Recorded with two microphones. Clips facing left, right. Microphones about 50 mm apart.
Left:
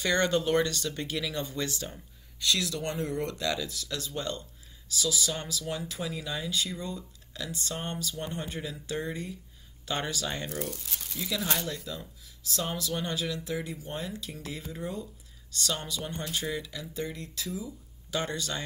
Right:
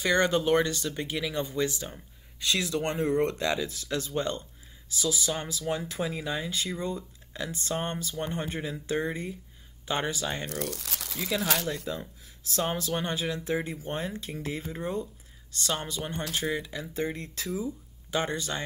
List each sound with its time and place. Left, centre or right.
0.0 s speech: centre
2.4 s speech: right
10.4 s speech: right
11.6 s speech: right